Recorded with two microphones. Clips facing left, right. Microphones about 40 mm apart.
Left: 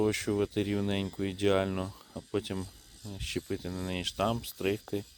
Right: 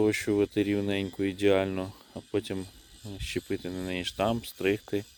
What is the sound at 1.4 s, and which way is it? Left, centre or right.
Speech, centre.